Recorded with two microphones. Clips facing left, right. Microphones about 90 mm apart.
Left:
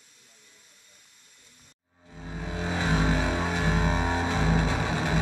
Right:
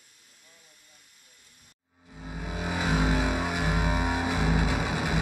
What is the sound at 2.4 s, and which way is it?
Music, 15° right (ahead or behind).